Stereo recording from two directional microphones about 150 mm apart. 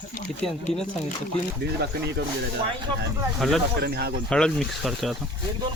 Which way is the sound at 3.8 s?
90° right.